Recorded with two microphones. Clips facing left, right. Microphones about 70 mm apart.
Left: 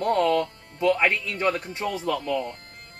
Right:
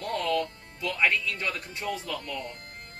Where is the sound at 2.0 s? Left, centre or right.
Left.